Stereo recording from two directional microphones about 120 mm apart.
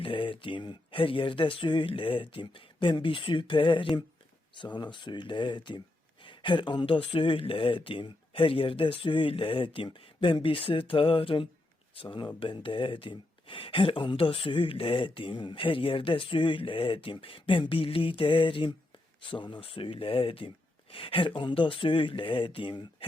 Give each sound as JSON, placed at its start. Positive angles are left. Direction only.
{"t": 0.0, "sound": "speech", "side_deg": 45}